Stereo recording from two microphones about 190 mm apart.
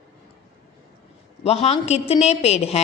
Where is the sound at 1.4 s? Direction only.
35° left (ahead or behind).